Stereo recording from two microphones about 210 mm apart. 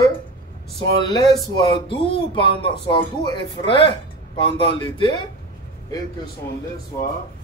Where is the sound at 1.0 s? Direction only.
20° left (ahead or behind).